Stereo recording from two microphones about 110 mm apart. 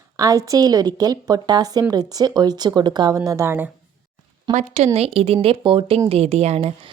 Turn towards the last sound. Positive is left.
turn(degrees=-65)  # may be behind; listen again after turning